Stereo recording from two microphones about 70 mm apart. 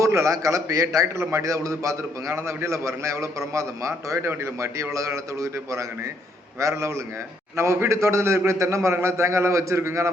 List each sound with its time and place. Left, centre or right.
0.0 s a man's voice: right